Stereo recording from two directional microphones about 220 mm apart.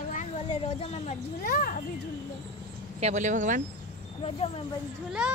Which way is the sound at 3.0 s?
30° right (ahead or behind).